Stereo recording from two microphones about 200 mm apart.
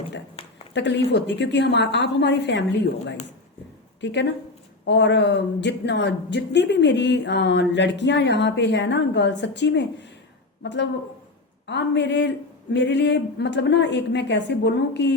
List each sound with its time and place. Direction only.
0.7 s speech: 60° left (ahead or behind)
4.0 s speech: 60° left (ahead or behind)